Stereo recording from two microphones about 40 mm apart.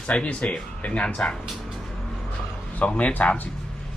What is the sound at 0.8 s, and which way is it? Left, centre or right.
Speech, left.